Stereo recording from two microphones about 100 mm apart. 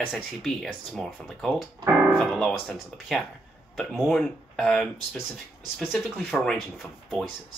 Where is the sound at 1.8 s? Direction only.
30° right (ahead or behind).